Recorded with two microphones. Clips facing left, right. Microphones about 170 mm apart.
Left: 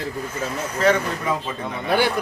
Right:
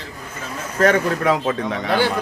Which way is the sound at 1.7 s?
90° right.